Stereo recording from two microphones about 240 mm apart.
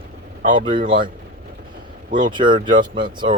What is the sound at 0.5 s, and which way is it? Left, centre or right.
Speech, centre.